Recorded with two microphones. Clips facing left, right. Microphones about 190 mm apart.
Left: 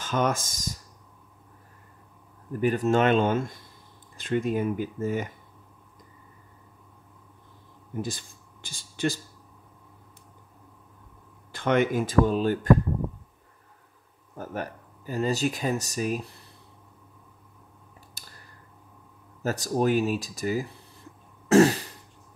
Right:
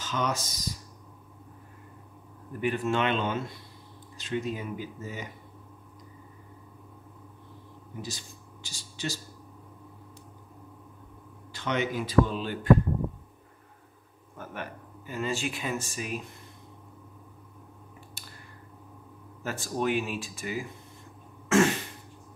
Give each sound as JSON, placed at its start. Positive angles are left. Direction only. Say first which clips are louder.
{"t": 0.0, "sound": "speech", "louder": "left 5 dB", "side_deg": 50}
{"t": 2.5, "sound": "speech", "louder": "left 5 dB", "side_deg": 40}
{"t": 8.0, "sound": "speech", "louder": "left 7 dB", "side_deg": 55}
{"t": 11.5, "sound": "speech", "louder": "left 6 dB", "side_deg": 50}
{"t": 14.3, "sound": "speech", "louder": "left 5 dB", "side_deg": 40}
{"t": 18.2, "sound": "a sound", "louder": "right 2 dB", "side_deg": 40}
{"t": 19.4, "sound": "speech", "louder": "left 5 dB", "side_deg": 40}
{"t": 21.5, "sound": "throat clearing", "louder": "left 5 dB", "side_deg": 35}